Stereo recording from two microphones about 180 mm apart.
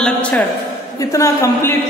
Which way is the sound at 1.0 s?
20° left (ahead or behind).